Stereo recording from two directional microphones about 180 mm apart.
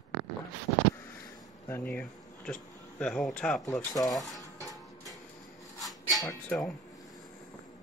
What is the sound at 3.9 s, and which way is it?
Speech, 20° left (ahead or behind).